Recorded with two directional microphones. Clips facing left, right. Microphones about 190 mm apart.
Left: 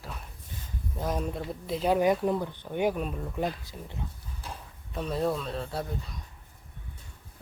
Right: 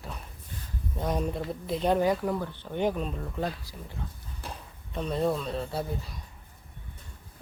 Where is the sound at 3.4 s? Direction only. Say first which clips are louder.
Left 2 dB; 20° left (ahead or behind).